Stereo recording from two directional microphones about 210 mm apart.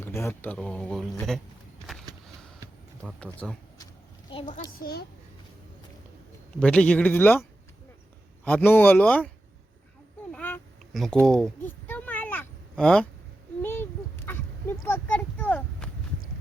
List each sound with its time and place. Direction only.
0.0 s speech: 15° left (ahead or behind)
3.4 s speech: centre (ahead or behind)
4.3 s a woman's voice: 25° left (ahead or behind)
4.5 s a child's voice: 45° left (ahead or behind)
6.6 s speech: 5° left (ahead or behind)
8.4 s speech: 10° left (ahead or behind)
10.3 s a sound: 5° left (ahead or behind)